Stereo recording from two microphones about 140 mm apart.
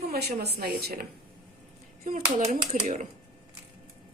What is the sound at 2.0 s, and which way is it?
Speech, 85° right.